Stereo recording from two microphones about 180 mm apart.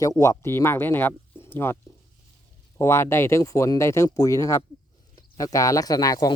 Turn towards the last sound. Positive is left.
turn(degrees=20)  # may be behind; listen again after turning